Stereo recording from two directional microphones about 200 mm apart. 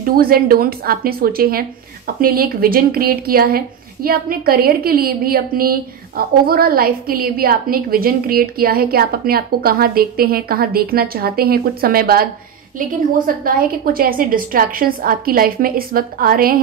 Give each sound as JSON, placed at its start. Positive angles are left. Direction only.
{"t": 0.0, "sound": "a woman's voice", "side_deg": -50}
{"t": 13.4, "sound": "a woman's voice", "side_deg": -45}